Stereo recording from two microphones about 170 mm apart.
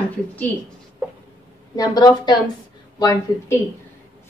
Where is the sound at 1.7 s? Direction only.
25° left (ahead or behind).